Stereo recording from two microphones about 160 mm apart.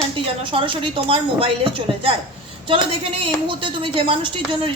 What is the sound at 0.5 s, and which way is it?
Speech, 30° right (ahead or behind).